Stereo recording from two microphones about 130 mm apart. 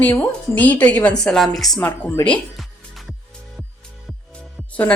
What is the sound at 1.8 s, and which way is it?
Speech, 20° left (ahead or behind).